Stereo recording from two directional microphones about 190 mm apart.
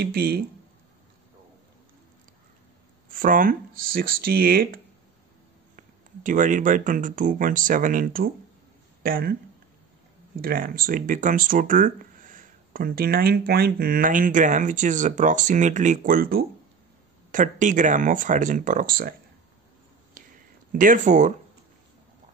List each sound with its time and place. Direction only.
0.0 s speech: 55° right (ahead or behind)
3.1 s speech: 45° right (ahead or behind)
5.8 s speech: 45° right (ahead or behind)
10.4 s speech: 50° right (ahead or behind)
20.2 s a sound: 45° right (ahead or behind)